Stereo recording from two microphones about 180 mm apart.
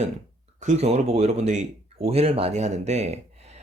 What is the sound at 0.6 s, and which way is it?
A man's voice, 40° right (ahead or behind).